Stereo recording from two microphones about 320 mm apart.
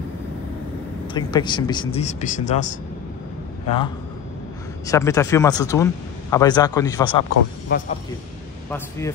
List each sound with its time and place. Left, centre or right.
1.1 s speech: centre
8.6 s speech: centre